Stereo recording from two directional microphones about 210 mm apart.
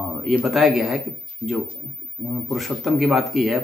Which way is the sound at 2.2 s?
Centre (ahead or behind).